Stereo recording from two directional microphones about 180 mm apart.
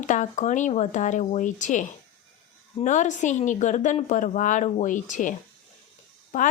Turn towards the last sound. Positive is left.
turn(degrees=50)  # may be behind; listen again after turning